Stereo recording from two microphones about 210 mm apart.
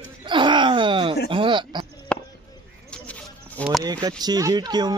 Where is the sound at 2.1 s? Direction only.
5° left (ahead or behind).